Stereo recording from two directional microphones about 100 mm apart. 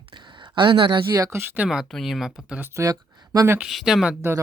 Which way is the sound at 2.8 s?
40° right (ahead or behind).